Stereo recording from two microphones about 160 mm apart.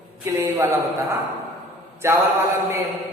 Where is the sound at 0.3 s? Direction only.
15° right (ahead or behind).